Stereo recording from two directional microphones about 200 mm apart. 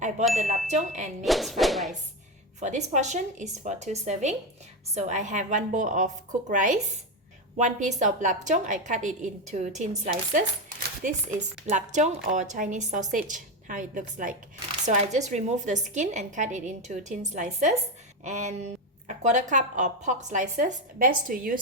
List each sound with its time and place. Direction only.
0.3 s a woman's voice: 35° right (ahead or behind)
1.2 s speech: centre (ahead or behind)
2.6 s a woman's voice: 35° right (ahead or behind)